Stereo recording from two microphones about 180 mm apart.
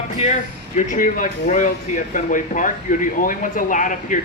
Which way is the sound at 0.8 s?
45° left (ahead or behind).